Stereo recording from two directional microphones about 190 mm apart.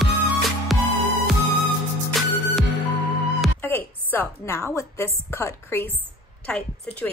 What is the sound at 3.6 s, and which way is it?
A woman's voice, 10° left (ahead or behind).